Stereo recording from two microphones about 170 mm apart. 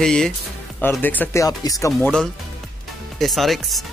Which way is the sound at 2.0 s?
5° left (ahead or behind).